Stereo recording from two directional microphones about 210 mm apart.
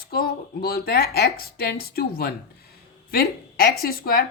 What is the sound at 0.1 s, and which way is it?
A woman's voice, 45° left (ahead or behind).